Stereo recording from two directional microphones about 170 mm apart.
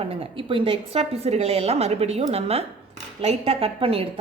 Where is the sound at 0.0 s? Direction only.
35° right (ahead or behind).